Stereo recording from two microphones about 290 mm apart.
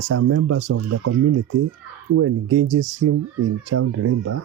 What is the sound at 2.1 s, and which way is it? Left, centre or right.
Speech, right.